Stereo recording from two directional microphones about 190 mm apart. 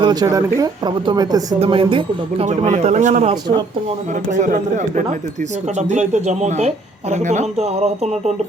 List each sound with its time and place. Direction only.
0.0 s speech: 20° right (ahead or behind)
1.5 s speech: 30° right (ahead or behind)